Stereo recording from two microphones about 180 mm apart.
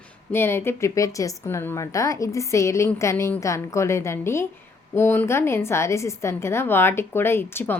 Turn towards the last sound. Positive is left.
turn(degrees=10)  # may be behind; listen again after turning